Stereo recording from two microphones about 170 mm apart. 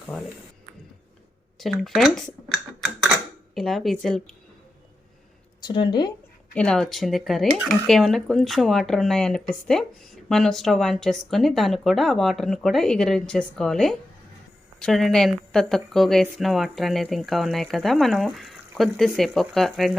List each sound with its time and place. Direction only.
1.5 s speech: centre (ahead or behind)
5.5 s speech: 25° left (ahead or behind)
6.5 s speech: 5° left (ahead or behind)